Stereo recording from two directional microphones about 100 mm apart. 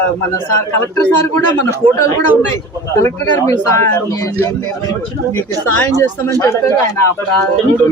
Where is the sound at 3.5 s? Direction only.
30° left (ahead or behind).